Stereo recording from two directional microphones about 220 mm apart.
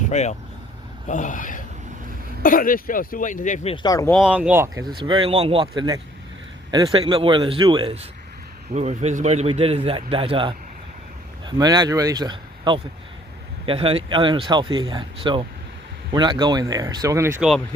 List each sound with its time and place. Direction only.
0.1 s speech: 30° left (ahead or behind)
3.8 s speech: 15° left (ahead or behind)
4.1 s a man's voice: 5° right (ahead or behind)